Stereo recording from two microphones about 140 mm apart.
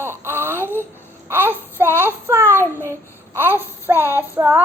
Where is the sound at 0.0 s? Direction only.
15° right (ahead or behind).